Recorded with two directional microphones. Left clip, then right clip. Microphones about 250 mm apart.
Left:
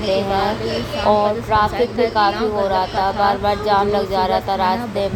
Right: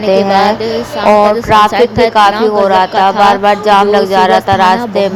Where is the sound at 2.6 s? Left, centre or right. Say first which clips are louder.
Right 10 dB; right.